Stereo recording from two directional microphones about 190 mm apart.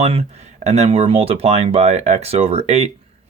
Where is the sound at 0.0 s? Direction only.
35° right (ahead or behind).